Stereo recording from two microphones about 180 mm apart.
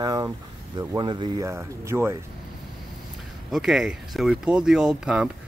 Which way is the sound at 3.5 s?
Centre (ahead or behind).